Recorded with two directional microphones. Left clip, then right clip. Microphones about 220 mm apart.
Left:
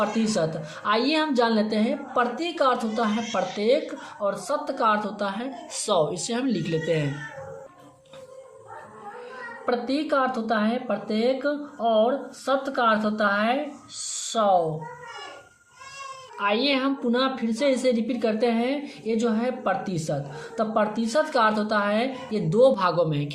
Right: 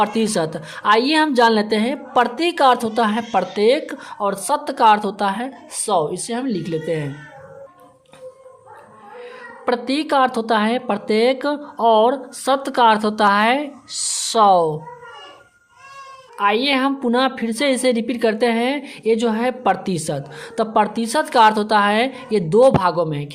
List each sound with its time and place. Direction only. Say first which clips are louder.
0.0 s a woman's voice: right 6 dB; 45° right (ahead or behind); by 7.1 s 30° right (ahead or behind)
9.6 s a woman's voice: right 5 dB; 45° right (ahead or behind)
16.4 s a woman's voice: right 6 dB; 35° right (ahead or behind)